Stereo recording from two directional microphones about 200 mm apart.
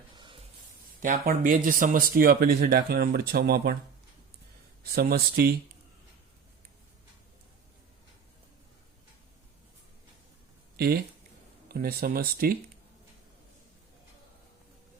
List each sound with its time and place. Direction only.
0.2 s music: 25° right (ahead or behind)
1.0 s speech: 45° right (ahead or behind)
4.8 s speech: 50° right (ahead or behind)
10.8 s speech: 50° right (ahead or behind)